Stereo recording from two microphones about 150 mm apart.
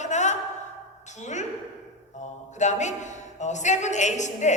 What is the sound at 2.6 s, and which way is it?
A woman's voice, 50° left (ahead or behind).